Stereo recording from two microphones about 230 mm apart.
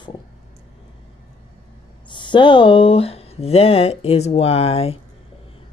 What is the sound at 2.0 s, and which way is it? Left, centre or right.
Speech, centre.